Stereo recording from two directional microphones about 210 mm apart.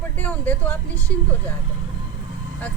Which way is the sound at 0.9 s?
15° right (ahead or behind).